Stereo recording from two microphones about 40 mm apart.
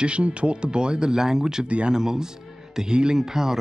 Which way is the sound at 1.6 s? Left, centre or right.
Right.